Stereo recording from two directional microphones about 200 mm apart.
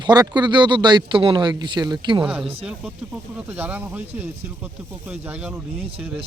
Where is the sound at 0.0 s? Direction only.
20° right (ahead or behind).